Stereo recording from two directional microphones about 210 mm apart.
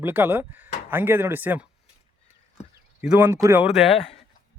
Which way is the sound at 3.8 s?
25° left (ahead or behind).